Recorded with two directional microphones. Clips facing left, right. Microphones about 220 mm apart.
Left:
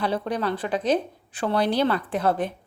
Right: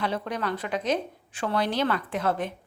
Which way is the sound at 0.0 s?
35° left (ahead or behind).